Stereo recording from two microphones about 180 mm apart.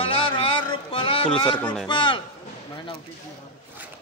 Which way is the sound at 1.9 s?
25° left (ahead or behind).